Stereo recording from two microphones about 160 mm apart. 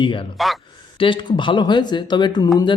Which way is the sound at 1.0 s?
30° left (ahead or behind).